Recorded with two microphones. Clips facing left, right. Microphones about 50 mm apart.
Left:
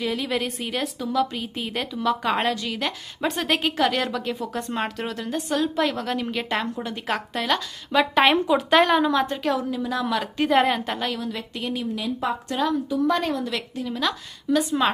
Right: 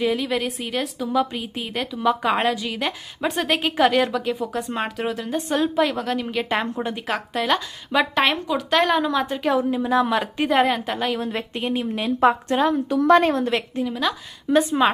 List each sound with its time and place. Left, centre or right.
0.0 s a woman's voice: centre
1.1 s a woman's voice: centre
1.4 s a woman's voice: centre
6.6 s a woman's voice: right
6.9 s a woman's voice: centre
8.1 s a woman's voice: centre
9.6 s a woman's voice: right
10.5 s a woman's voice: centre
11.2 s a woman's voice: right
11.9 s a woman's voice: right
12.9 s a woman's voice: right
13.8 s a woman's voice: centre
14.5 s a woman's voice: right